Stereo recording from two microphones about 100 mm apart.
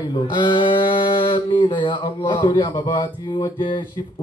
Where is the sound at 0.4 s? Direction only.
55° left (ahead or behind).